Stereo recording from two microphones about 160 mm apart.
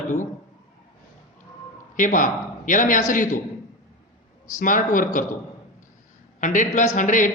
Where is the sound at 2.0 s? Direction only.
55° left (ahead or behind).